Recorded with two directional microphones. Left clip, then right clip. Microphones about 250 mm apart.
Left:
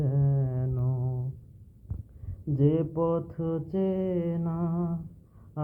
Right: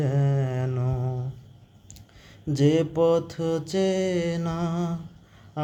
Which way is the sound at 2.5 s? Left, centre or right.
Centre.